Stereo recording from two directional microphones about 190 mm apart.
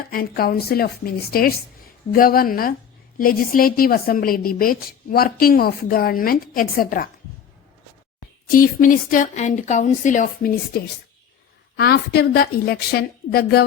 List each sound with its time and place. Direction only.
0.1 s a woman's voice: 50° left (ahead or behind)
8.4 s a woman's voice: 45° left (ahead or behind)
11.8 s a woman's voice: 55° left (ahead or behind)